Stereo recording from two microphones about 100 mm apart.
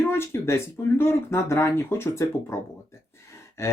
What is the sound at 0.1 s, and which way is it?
Speech, 25° left (ahead or behind).